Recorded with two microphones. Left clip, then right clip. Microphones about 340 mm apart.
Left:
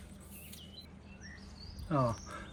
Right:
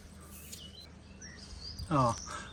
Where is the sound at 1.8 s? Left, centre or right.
Centre.